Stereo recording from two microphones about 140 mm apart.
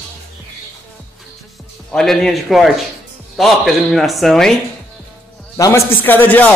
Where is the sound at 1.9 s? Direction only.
5° left (ahead or behind).